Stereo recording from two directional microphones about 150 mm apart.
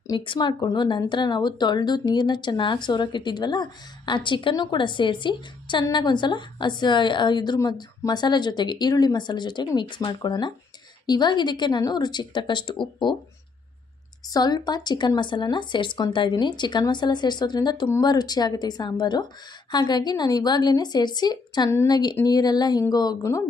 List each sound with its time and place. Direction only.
0.1 s speech: 30° left (ahead or behind)
14.3 s speech: 25° left (ahead or behind)